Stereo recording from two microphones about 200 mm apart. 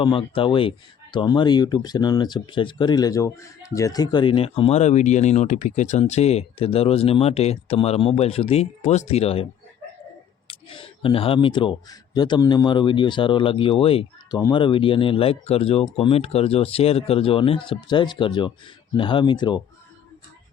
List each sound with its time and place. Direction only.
0.0 s speech: 25° left (ahead or behind)